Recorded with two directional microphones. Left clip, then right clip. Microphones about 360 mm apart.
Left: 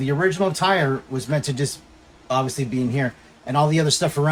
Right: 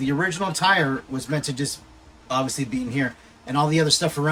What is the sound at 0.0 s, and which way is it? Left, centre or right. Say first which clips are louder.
Speech: left 3 dB; centre.